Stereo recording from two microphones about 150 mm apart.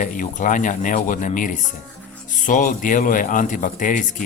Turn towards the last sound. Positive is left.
turn(degrees=60)  # may be behind; listen again after turning